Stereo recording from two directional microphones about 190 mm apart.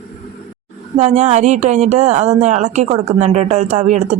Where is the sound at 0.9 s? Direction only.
35° right (ahead or behind).